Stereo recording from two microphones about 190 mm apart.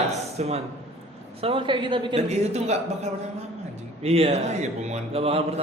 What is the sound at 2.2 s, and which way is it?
A man's voice, 35° right (ahead or behind).